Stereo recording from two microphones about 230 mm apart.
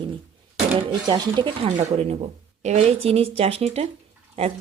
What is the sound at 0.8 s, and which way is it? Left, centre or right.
Speech, centre.